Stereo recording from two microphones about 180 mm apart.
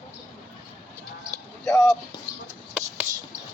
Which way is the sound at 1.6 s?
5° left (ahead or behind).